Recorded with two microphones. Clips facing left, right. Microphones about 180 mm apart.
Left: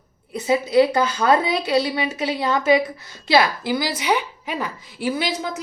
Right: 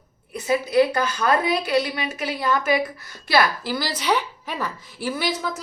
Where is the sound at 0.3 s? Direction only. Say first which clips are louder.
Left 2 dB; 25° left (ahead or behind).